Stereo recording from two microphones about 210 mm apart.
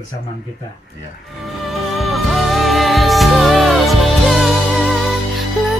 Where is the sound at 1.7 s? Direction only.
Centre (ahead or behind).